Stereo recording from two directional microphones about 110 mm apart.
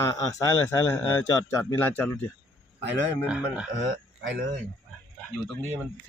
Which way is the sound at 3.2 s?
10° right (ahead or behind).